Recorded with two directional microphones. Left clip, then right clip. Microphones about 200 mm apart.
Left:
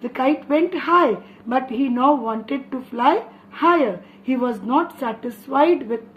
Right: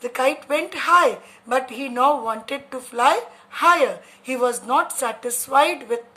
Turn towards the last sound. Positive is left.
turn(degrees=-60)  # may be behind; listen again after turning